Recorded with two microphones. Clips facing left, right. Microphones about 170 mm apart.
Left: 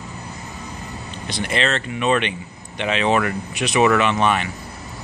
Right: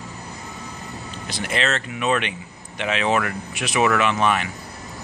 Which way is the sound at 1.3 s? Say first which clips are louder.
Left 2 dB; 5° right (ahead or behind).